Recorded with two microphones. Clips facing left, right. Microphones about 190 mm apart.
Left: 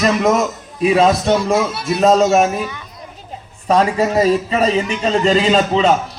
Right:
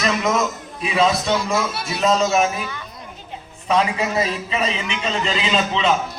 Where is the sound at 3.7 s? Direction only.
45° left (ahead or behind).